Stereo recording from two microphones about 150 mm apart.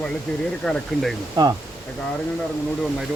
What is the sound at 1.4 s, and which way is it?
Speech, 30° right (ahead or behind).